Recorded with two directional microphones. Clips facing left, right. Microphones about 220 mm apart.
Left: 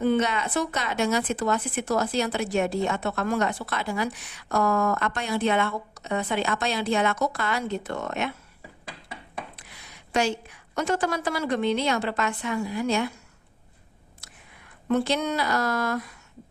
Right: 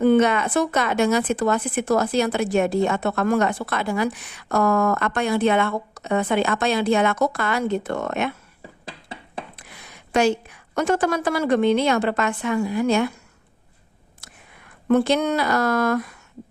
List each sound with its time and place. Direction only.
0.0 s speech: 55° right (ahead or behind)
9.6 s a sound: 55° right (ahead or behind)
10.8 s a woman's voice: 50° right (ahead or behind)
14.8 s a woman's voice: 55° right (ahead or behind)